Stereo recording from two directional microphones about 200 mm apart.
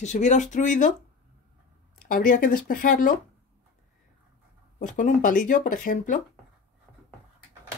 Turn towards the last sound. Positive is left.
turn(degrees=40)  # may be behind; listen again after turning